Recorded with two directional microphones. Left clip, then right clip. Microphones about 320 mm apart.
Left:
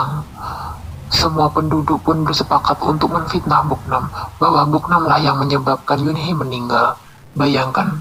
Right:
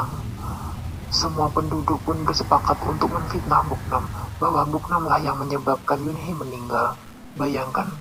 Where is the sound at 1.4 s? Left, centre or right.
Left.